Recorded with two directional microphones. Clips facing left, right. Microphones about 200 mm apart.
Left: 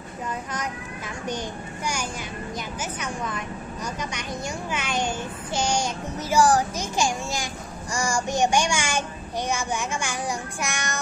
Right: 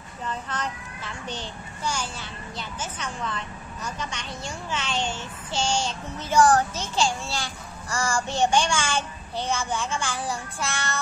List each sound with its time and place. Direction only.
0.5 s a child's voice: 10° left (ahead or behind)